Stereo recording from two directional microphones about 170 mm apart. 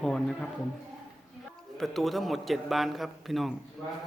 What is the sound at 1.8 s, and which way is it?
Speech, centre (ahead or behind).